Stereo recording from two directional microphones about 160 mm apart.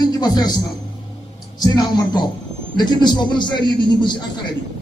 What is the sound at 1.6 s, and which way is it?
A man's voice, 25° left (ahead or behind).